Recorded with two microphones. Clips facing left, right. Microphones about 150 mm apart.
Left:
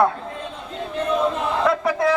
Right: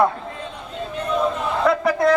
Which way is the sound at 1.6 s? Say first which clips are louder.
Right 3 dB; centre (ahead or behind).